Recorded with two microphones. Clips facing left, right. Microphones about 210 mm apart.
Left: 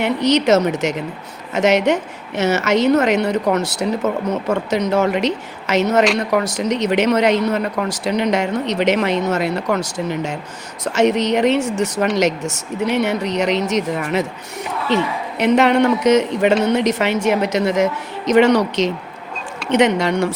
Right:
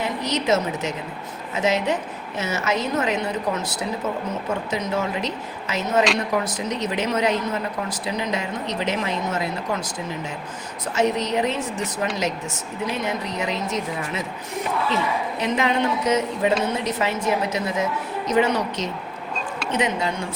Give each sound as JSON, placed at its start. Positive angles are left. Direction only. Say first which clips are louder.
{"t": 0.0, "sound": "a woman's voice", "louder": "left 9 dB", "side_deg": 75}